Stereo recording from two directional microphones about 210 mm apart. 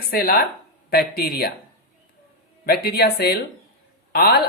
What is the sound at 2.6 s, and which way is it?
A man's voice, 50° left (ahead or behind).